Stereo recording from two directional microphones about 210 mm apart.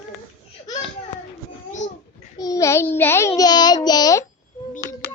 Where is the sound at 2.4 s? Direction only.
15° left (ahead or behind).